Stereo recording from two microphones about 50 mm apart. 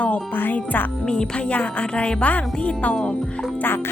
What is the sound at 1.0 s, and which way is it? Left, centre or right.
Music, centre.